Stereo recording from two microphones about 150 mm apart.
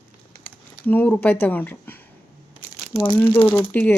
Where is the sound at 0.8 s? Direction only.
10° left (ahead or behind).